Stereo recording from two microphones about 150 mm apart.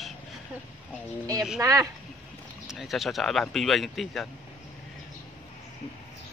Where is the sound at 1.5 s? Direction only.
20° right (ahead or behind).